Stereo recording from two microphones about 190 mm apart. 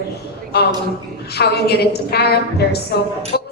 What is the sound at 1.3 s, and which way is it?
A woman's voice, 60° left (ahead or behind).